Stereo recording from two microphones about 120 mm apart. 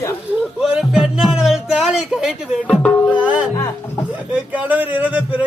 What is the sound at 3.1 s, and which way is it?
Speech, 10° right (ahead or behind).